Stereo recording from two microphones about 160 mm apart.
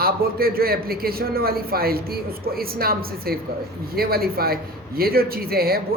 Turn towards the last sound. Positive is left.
turn(degrees=-70)  # may be behind; listen again after turning